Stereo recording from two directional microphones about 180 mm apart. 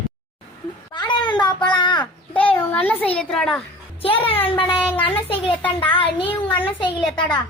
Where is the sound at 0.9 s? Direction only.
25° left (ahead or behind).